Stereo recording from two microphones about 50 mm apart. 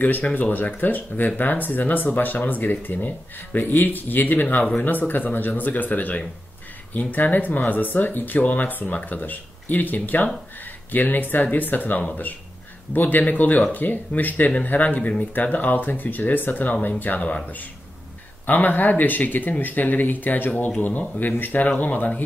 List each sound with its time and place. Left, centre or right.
0.2 s speech: left
18.5 s speech: left